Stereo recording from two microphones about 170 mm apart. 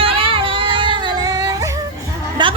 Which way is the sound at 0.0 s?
30° right (ahead or behind).